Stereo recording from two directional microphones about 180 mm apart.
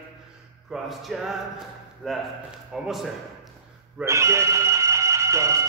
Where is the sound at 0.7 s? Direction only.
Centre (ahead or behind).